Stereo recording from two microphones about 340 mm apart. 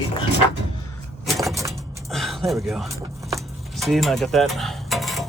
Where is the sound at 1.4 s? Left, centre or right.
Centre.